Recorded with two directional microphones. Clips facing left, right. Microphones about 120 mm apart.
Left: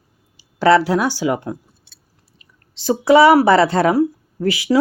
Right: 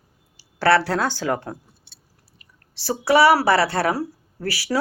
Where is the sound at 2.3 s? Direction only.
20° left (ahead or behind).